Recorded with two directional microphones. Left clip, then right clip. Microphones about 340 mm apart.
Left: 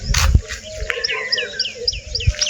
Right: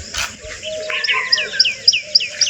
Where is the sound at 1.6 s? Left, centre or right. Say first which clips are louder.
Right 8 dB; centre.